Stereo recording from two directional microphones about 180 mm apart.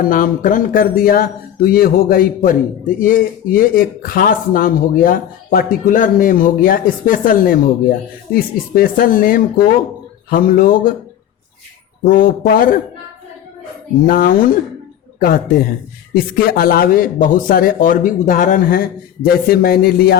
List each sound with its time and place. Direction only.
0.0 s speech: 50° left (ahead or behind)
12.0 s speech: 50° left (ahead or behind)
14.1 s speech: 50° left (ahead or behind)
16.1 s speech: 55° left (ahead or behind)